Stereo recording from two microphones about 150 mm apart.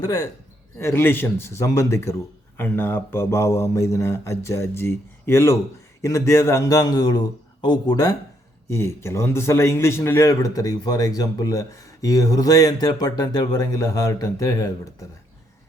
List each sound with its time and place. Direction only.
0.0 s a man's voice: 20° left (ahead or behind)